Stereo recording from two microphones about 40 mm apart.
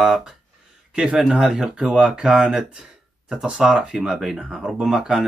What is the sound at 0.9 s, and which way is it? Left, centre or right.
Speech, right.